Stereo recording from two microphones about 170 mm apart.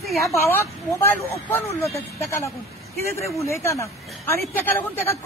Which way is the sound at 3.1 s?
15° left (ahead or behind).